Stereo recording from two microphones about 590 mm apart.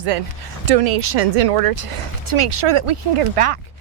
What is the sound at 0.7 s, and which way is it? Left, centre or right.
Speech, right.